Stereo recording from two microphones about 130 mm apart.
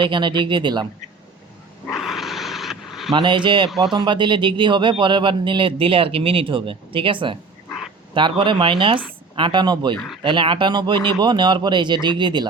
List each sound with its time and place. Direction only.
0.0 s speech: 35° right (ahead or behind)
1.9 s dog: centre (ahead or behind)
3.1 s speech: 35° right (ahead or behind)